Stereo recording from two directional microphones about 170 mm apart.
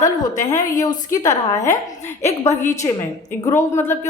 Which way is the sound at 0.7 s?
20° left (ahead or behind).